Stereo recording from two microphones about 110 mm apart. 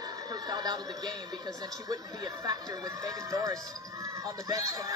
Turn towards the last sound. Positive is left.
turn(degrees=-30)  # may be behind; listen again after turning